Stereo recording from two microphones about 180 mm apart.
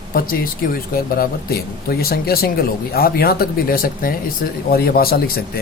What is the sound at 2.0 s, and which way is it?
A man's voice, 55° left (ahead or behind).